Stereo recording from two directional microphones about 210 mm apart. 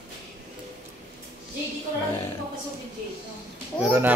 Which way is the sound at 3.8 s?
10° right (ahead or behind).